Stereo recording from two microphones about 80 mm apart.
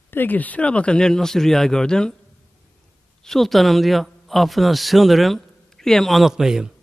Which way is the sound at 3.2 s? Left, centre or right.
Centre.